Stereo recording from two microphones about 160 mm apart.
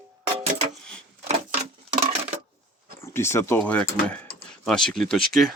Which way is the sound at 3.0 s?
15° left (ahead or behind).